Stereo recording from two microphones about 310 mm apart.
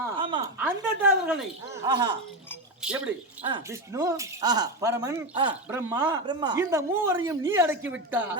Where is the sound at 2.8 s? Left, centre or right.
Centre.